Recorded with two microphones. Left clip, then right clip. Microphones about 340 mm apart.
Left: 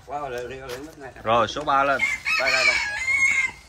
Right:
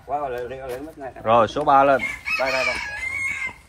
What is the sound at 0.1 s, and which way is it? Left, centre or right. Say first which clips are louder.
Speech: right 4 dB; centre.